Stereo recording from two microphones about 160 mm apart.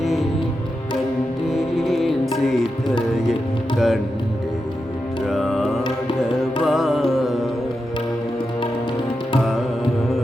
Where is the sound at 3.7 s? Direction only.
Centre (ahead or behind).